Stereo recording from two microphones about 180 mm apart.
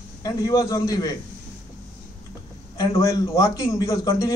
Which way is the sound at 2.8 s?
20° left (ahead or behind).